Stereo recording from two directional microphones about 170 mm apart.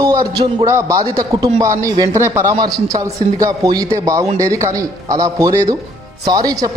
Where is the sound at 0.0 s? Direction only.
15° right (ahead or behind).